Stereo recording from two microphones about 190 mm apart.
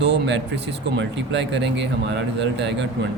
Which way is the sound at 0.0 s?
65° right (ahead or behind).